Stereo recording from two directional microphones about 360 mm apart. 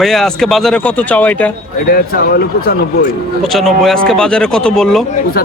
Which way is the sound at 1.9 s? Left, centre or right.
Left.